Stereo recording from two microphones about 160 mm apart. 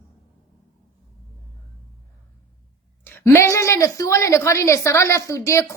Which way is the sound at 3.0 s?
15° left (ahead or behind).